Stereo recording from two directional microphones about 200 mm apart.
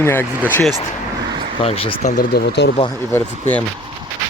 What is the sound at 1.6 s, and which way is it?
Speech, 30° left (ahead or behind).